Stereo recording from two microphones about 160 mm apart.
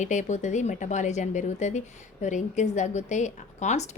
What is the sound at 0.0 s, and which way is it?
A woman's voice, 50° left (ahead or behind).